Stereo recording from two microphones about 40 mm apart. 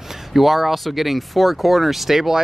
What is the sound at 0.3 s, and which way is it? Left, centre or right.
Speech, centre.